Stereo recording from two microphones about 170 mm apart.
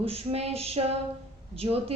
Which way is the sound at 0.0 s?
35° right (ahead or behind).